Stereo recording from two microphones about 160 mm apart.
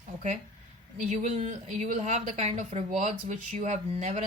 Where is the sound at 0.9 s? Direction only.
50° right (ahead or behind).